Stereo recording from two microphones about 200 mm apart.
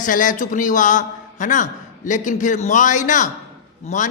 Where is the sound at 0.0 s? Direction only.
40° left (ahead or behind).